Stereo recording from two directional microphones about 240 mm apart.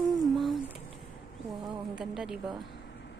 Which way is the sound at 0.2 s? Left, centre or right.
Centre.